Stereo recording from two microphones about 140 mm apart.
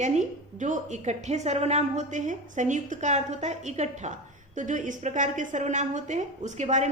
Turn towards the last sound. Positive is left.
turn(degrees=-60)  # may be behind; listen again after turning